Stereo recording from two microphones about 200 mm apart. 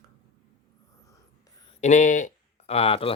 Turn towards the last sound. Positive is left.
turn(degrees=30)  # may be behind; listen again after turning